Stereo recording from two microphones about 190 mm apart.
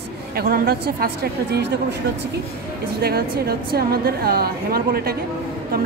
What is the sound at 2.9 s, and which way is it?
A woman's voice, 55° right (ahead or behind).